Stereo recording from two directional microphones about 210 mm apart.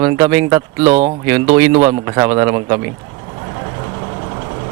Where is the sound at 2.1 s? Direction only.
15° right (ahead or behind).